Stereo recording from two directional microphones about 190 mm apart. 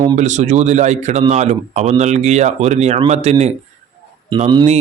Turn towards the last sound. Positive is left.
turn(degrees=-25)  # may be behind; listen again after turning